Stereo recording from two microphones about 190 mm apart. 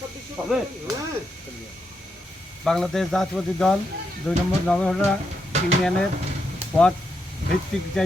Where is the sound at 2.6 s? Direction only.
Centre (ahead or behind).